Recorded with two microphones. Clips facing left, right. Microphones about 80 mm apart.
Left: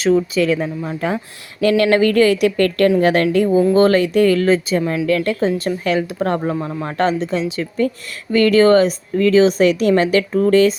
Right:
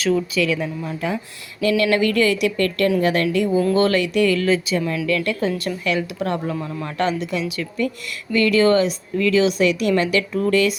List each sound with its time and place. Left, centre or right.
0.0 s speech: left
8.3 s speech: left